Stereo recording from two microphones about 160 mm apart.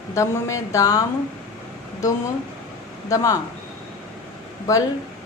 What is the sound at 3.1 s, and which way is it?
Speech, 20° left (ahead or behind).